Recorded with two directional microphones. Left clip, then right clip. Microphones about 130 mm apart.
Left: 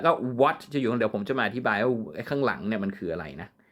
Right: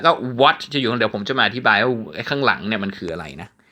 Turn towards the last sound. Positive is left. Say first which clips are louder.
# right 4 dB
turn(degrees=-35)  # may be behind; listen again after turning